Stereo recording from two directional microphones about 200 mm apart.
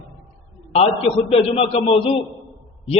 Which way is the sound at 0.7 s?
30° left (ahead or behind).